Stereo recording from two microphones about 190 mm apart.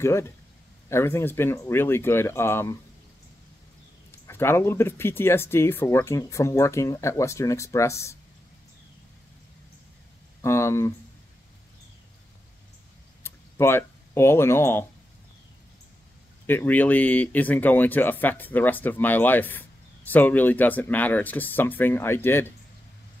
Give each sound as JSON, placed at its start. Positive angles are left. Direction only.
{"t": 0.0, "sound": "speech", "side_deg": 15}
{"t": 4.3, "sound": "speech", "side_deg": 10}
{"t": 10.4, "sound": "speech", "side_deg": 15}
{"t": 13.2, "sound": "a sound", "side_deg": 10}
{"t": 16.4, "sound": "speech", "side_deg": 10}